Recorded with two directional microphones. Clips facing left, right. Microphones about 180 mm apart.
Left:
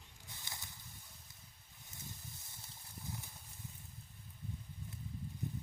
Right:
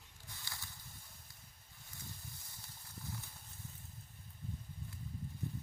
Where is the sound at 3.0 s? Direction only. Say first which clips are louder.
Left 1 dB; 15° left (ahead or behind).